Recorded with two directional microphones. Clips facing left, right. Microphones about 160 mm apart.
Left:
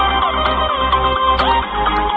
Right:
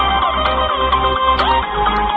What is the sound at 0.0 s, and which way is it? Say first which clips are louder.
Music: even; centre (ahead or behind).